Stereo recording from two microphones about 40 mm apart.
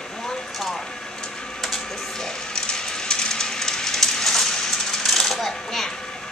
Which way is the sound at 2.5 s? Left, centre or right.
Centre.